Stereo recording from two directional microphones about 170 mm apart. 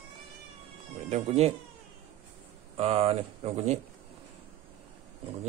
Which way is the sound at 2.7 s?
35° right (ahead or behind).